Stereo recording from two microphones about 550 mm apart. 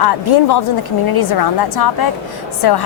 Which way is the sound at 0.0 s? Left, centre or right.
Left.